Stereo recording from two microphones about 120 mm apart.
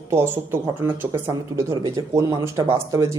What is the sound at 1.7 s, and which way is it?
Speech, 30° right (ahead or behind).